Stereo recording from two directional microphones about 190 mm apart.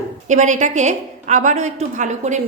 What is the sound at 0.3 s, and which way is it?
A woman's voice, 40° right (ahead or behind).